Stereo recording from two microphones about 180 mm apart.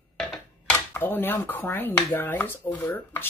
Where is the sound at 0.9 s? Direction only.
10° left (ahead or behind).